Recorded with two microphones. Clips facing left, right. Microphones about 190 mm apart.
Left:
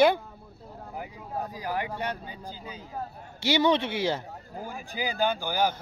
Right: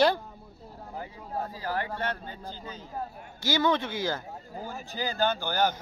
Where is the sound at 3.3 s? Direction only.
75° left (ahead or behind).